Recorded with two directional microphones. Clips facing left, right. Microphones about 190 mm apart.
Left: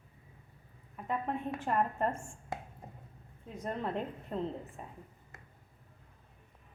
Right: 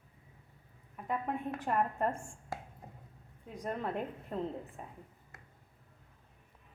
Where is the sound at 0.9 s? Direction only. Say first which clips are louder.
Left 1 dB; 5° right (ahead or behind).